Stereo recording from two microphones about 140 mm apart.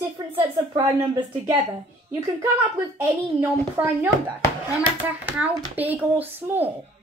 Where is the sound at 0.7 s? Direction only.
20° right (ahead or behind).